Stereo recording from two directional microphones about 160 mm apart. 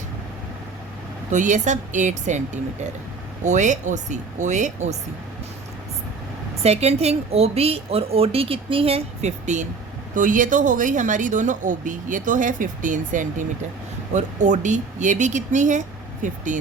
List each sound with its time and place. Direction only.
1.3 s speech: 50° right (ahead or behind)
6.6 s a woman's voice: 40° right (ahead or behind)